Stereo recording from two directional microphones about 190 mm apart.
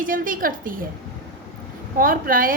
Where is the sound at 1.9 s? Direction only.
45° right (ahead or behind).